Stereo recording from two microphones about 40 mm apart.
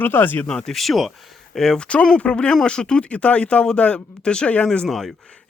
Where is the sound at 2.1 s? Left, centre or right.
Left.